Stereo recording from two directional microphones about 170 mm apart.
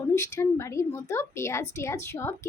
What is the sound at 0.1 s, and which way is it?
Speech, 15° left (ahead or behind).